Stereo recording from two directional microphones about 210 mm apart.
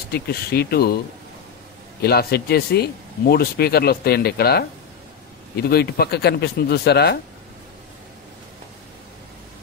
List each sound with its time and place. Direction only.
0.1 s speech: 50° left (ahead or behind)
2.0 s speech: 50° left (ahead or behind)